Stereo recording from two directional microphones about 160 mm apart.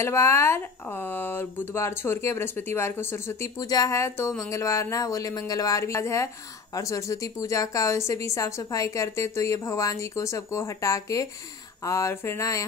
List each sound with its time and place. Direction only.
0.0 s speech: 15° left (ahead or behind)